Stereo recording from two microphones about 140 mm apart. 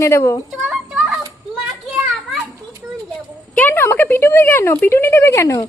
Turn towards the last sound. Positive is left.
turn(degrees=20)  # may be behind; listen again after turning